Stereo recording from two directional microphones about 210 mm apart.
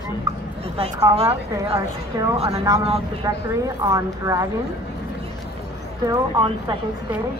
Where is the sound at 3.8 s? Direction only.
15° right (ahead or behind).